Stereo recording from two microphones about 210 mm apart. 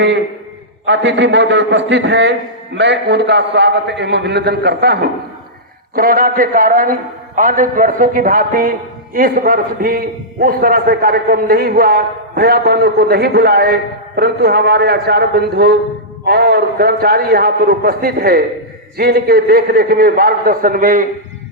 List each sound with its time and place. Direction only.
0.9 s a man's voice: 60° right (ahead or behind); by 21.1 s 40° right (ahead or behind)